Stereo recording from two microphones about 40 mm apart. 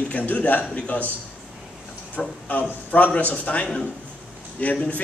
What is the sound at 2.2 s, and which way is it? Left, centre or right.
Speech, left.